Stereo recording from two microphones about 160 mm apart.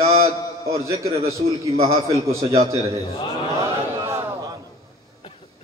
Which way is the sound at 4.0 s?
20° right (ahead or behind).